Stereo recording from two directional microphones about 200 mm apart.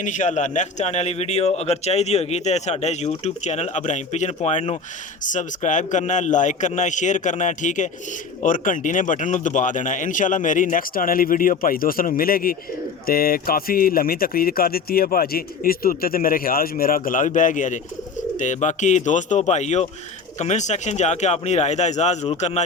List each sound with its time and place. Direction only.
0.0 s a man's voice: 40° left (ahead or behind)